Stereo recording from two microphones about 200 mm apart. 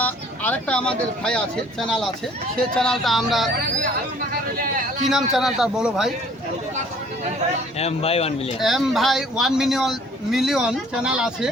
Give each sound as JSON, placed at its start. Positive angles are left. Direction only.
{"t": 0.0, "sound": "speech", "side_deg": 5}
{"t": 5.3, "sound": "speech", "side_deg": 0}
{"t": 7.8, "sound": "speech", "side_deg": 30}
{"t": 8.6, "sound": "speech", "side_deg": 0}